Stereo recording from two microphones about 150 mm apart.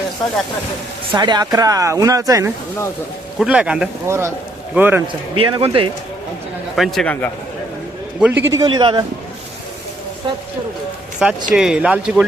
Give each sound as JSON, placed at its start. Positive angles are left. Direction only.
{"t": 1.1, "sound": "speech", "side_deg": -30}
{"t": 3.3, "sound": "speech", "side_deg": -5}
{"t": 4.0, "sound": "speech", "side_deg": -20}
{"t": 5.3, "sound": "speech", "side_deg": -35}
{"t": 6.7, "sound": "speech", "side_deg": 0}
{"t": 8.2, "sound": "speech", "side_deg": -15}
{"t": 10.3, "sound": "speech", "side_deg": -35}
{"t": 11.2, "sound": "speech", "side_deg": -5}